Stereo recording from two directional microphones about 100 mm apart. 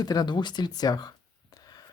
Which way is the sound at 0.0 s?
40° left (ahead or behind).